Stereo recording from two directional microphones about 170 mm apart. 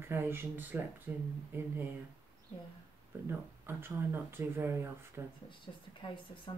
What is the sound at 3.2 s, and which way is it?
Speech, 15° right (ahead or behind).